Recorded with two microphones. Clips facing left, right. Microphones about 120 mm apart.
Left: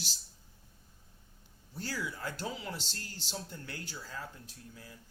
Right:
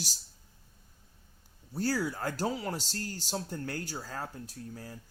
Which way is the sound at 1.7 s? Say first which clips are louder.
Right 8 dB; 40° right (ahead or behind).